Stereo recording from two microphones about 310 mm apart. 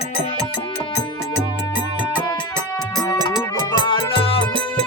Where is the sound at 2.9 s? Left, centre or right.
Centre.